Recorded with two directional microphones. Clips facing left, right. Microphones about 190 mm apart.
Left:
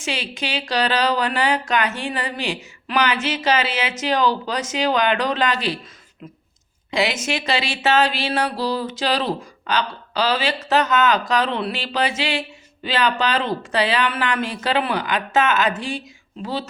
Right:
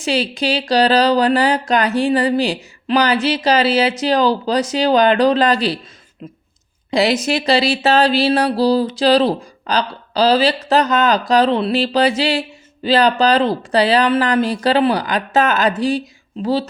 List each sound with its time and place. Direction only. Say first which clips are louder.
0.0 s speech: right 9 dB; 35° right (ahead or behind)
6.9 s speech: right 6 dB; 35° right (ahead or behind)